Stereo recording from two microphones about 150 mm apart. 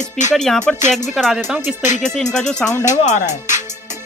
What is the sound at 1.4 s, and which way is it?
Speech, 15° right (ahead or behind).